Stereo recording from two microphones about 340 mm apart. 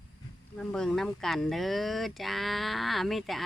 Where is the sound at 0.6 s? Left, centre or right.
Centre.